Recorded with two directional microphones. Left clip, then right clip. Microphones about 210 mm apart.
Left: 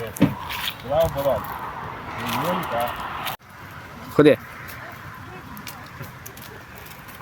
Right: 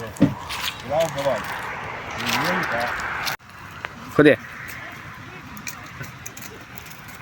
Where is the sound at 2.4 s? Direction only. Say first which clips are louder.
Right 1 dB; 40° left (ahead or behind).